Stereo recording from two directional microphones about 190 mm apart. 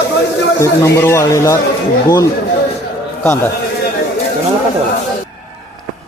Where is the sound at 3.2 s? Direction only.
10° left (ahead or behind).